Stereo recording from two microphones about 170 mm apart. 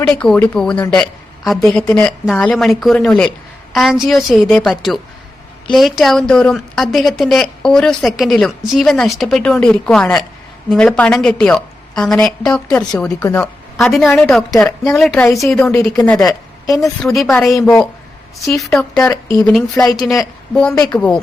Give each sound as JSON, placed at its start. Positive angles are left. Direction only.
{"t": 0.0, "sound": "a woman's voice", "side_deg": 5}
{"t": 13.1, "sound": "speech", "side_deg": 20}
{"t": 13.7, "sound": "a woman's voice", "side_deg": 0}
{"t": 16.2, "sound": "a woman's voice", "side_deg": 20}
{"t": 17.0, "sound": "a woman's voice", "side_deg": 0}
{"t": 19.1, "sound": "a woman's voice", "side_deg": 20}